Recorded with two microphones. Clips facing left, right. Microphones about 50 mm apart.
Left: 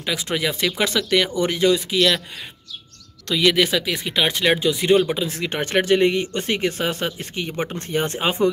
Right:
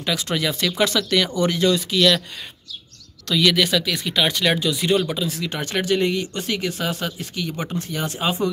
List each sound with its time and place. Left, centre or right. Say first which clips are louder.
0.0 s speech: even; centre
3.3 s speech: left 1 dB; left
5.3 s speech: left 4 dB; left